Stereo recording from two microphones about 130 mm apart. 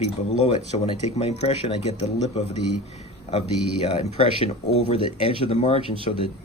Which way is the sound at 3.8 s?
50° left (ahead or behind).